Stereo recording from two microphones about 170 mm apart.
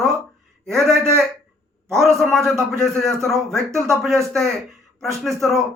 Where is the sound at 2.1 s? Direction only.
Centre (ahead or behind).